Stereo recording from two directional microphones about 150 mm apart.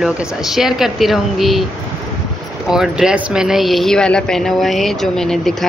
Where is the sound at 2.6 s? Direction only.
5° right (ahead or behind).